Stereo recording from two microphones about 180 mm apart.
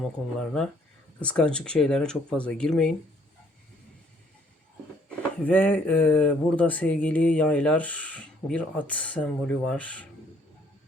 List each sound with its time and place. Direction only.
0.3 s speech: 5° left (ahead or behind)
5.0 s speech: 10° left (ahead or behind)